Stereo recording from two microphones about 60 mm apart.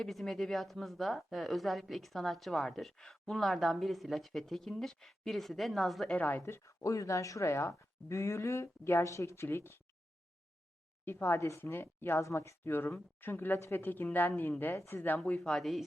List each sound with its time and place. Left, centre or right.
0.0 s speech: centre
6.1 s a woman's voice: left
6.4 s speech: left
11.0 s speech: left
11.3 s speech: left
11.6 s a woman's voice: left
12.2 s a woman's voice: left
15.4 s speech: centre